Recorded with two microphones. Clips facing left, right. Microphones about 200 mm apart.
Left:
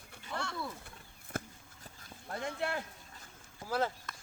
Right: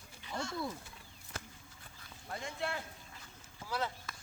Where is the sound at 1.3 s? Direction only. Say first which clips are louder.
Left 8 dB; 55° left (ahead or behind).